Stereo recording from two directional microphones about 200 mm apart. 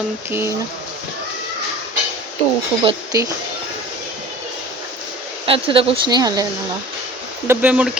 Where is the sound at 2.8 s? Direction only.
15° right (ahead or behind).